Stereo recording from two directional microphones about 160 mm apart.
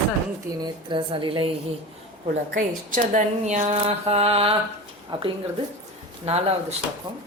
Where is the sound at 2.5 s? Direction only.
50° right (ahead or behind); by 5.3 s 35° right (ahead or behind).